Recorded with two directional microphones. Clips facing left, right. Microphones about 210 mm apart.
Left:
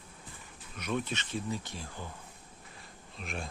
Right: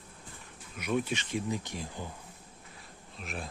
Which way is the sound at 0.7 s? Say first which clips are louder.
Right 3 dB; 10° right (ahead or behind).